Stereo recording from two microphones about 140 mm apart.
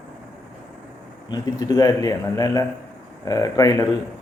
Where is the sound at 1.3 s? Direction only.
25° left (ahead or behind).